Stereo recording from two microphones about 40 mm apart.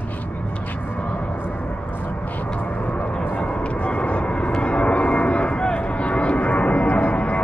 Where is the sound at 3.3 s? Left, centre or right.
Left.